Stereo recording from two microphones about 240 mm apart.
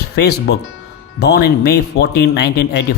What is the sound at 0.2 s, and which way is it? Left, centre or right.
Speech, left.